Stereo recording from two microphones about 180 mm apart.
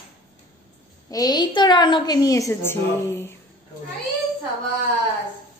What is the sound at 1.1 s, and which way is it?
A woman's voice, 20° left (ahead or behind).